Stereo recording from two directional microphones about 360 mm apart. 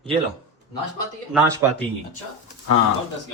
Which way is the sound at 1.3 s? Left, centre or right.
Centre.